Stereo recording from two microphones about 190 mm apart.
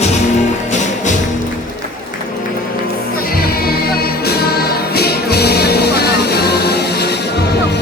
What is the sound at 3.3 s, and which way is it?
Music, 55° left (ahead or behind).